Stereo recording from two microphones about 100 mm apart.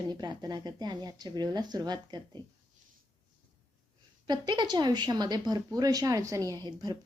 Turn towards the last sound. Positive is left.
turn(degrees=-40)  # may be behind; listen again after turning